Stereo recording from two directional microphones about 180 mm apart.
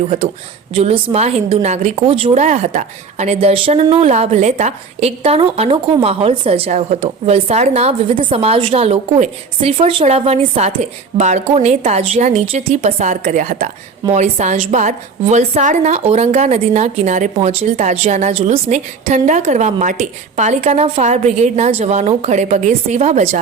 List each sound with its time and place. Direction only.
0.7 s a woman's voice: 30° right (ahead or behind)